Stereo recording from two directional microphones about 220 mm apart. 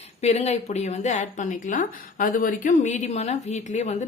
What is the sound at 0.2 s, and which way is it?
A woman's voice, 30° left (ahead or behind).